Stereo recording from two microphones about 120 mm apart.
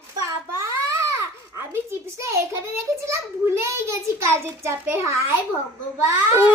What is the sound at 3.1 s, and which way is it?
A child's voice, 20° right (ahead or behind).